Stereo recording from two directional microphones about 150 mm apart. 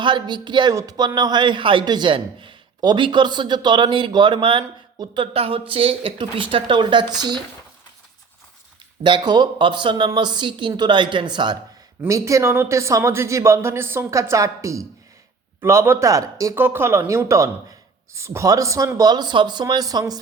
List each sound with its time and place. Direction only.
0.0 s speech: 30° right (ahead or behind)
9.0 s speech: 30° right (ahead or behind)